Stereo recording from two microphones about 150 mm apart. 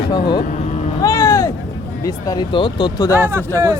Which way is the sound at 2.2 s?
30° left (ahead or behind).